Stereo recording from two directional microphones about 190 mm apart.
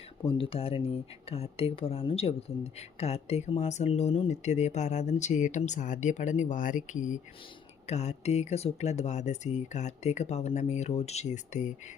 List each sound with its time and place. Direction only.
0.3 s speech: 30° left (ahead or behind)